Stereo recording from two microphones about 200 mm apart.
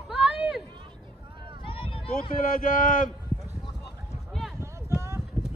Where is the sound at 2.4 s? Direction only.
45° left (ahead or behind).